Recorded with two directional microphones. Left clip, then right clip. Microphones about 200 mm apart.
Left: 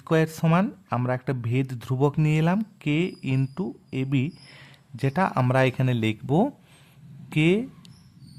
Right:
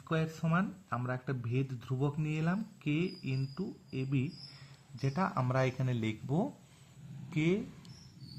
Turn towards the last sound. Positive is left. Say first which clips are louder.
# left 10 dB
turn(degrees=30)  # may be behind; listen again after turning